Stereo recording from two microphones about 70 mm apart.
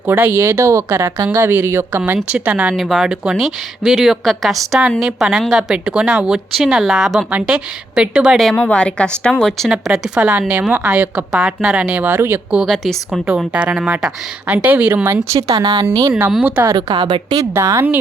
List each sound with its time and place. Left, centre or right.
0.1 s speech: right
0.4 s speech: right
2.3 s speech: right
2.7 s a woman's voice: centre
8.5 s a woman's voice: centre
9.6 s a woman's voice: centre
11.3 s a woman's voice: centre
11.8 s speech: centre
12.6 s speech: centre
13.2 s speech: centre; by 15.2 s right
15.4 s speech: right
15.9 s speech: right
16.7 s a woman's voice: right
17.5 s speech: right